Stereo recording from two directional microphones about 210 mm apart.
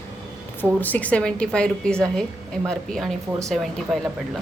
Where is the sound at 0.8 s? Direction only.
5° left (ahead or behind).